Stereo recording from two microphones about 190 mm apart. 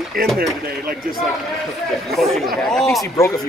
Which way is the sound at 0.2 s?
50° right (ahead or behind).